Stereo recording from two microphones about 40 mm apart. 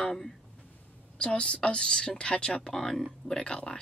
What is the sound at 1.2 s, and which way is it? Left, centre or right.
Speech, left.